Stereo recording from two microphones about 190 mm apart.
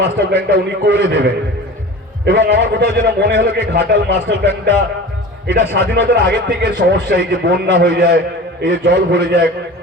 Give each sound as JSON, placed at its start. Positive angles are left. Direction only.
{"t": 0.0, "sound": "a man's voice", "side_deg": -60}
{"t": 5.7, "sound": "a man's voice", "side_deg": -60}